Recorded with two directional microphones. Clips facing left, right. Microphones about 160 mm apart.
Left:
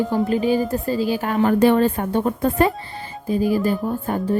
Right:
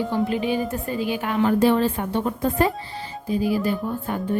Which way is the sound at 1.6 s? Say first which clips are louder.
Left 3 dB; 55° left (ahead or behind).